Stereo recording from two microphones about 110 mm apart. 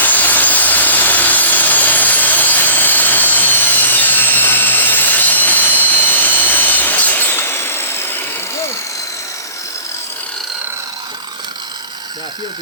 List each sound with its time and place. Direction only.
0.0 s wood: 15° left (ahead or behind)